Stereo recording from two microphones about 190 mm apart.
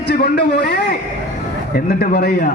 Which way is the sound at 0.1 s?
60° left (ahead or behind).